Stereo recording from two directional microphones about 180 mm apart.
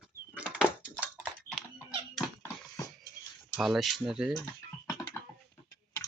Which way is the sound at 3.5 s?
Centre (ahead or behind).